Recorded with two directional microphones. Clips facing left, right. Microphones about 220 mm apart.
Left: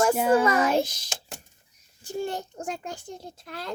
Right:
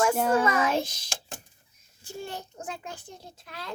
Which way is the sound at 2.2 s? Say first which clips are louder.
Left 6 dB; 45° left (ahead or behind).